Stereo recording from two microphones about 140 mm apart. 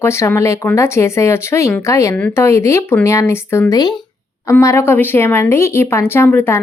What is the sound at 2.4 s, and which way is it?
A woman's voice, 20° left (ahead or behind).